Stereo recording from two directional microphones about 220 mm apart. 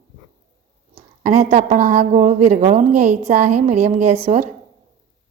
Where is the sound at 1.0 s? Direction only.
30° right (ahead or behind).